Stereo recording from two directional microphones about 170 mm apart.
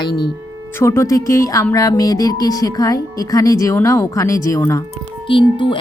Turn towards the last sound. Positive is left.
turn(degrees=30)  # may be behind; listen again after turning